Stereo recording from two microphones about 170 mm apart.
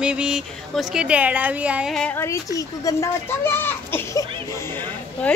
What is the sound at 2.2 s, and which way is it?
Speech, 20° left (ahead or behind).